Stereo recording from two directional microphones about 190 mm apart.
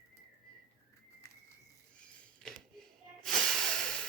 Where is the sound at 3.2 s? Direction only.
Centre (ahead or behind).